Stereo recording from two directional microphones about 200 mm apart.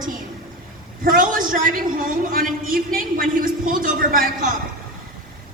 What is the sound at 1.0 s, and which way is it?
A man's voice, 45° right (ahead or behind).